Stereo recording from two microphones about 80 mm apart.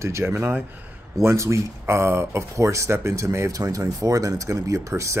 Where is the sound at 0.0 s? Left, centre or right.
Right.